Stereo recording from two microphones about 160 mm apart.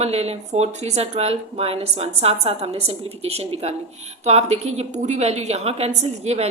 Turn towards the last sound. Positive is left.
turn(degrees=-40)  # may be behind; listen again after turning